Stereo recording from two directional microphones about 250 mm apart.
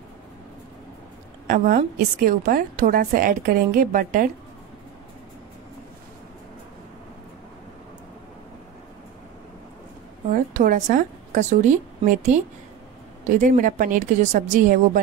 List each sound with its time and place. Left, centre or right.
1.5 s a woman's voice: right
10.3 s a woman's voice: right